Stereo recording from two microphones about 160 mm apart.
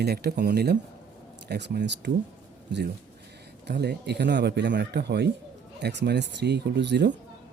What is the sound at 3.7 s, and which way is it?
Speech, 90° right.